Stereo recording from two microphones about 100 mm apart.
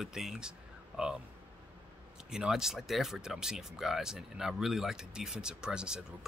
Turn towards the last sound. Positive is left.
turn(degrees=-10)  # may be behind; listen again after turning